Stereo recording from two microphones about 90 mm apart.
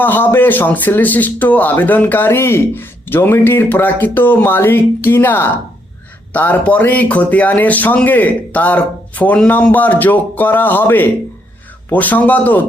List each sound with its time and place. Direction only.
0.0 s a man's voice: 20° left (ahead or behind)